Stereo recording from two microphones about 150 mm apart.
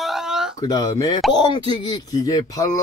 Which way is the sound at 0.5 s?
25° left (ahead or behind).